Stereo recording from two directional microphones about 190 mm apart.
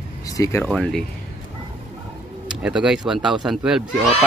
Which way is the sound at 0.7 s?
Centre (ahead or behind).